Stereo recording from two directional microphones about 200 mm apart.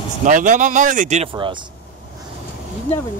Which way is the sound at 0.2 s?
40° right (ahead or behind).